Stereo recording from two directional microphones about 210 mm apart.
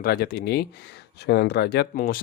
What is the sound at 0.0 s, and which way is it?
Speech, 45° left (ahead or behind).